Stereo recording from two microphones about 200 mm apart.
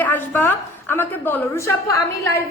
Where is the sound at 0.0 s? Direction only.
10° left (ahead or behind).